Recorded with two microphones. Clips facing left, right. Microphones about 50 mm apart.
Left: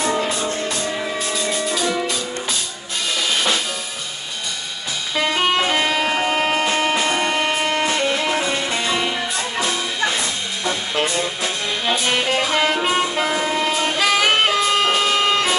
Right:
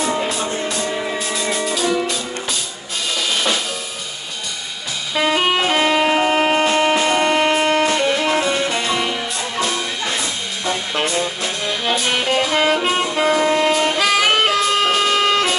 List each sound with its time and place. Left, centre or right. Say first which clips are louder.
0.0 s music: even; centre
3.3 s drum kit: even; centre
5.1 s music: right 2 dB; centre
10.7 s music: right 1 dB; centre
11.4 s music: right 1 dB; centre